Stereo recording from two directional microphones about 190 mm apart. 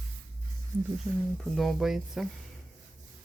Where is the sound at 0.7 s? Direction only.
10° right (ahead or behind).